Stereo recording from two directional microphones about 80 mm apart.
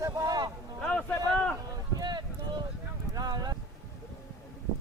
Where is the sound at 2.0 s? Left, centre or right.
Right.